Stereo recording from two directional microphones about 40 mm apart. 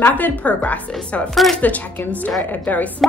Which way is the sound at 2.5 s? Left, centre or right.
Left.